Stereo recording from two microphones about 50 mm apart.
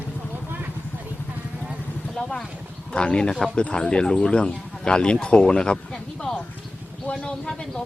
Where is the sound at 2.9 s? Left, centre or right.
Centre.